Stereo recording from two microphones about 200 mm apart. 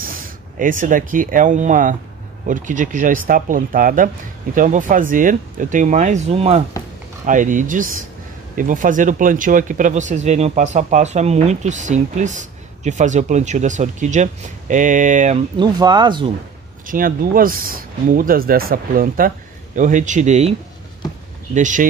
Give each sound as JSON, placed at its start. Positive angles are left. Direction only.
{"t": 0.0, "sound": "speech", "side_deg": -45}
{"t": 15.5, "sound": "speech", "side_deg": -20}
{"t": 16.8, "sound": "speech", "side_deg": -45}
{"t": 21.5, "sound": "speech", "side_deg": -40}